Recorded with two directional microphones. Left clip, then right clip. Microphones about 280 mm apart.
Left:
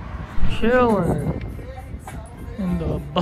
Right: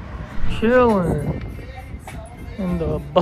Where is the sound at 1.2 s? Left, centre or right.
Right.